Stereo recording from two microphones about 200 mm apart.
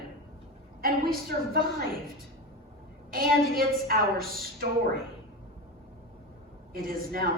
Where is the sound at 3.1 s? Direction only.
45° right (ahead or behind).